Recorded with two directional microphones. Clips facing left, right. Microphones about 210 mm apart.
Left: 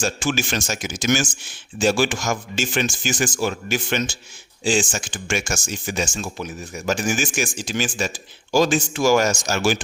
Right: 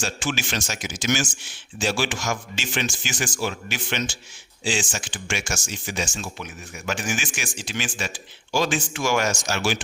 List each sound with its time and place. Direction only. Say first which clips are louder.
0.0 s speech: left 5 dB; 45° left (ahead or behind)